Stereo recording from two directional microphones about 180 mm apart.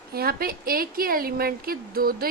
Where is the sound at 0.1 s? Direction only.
60° right (ahead or behind).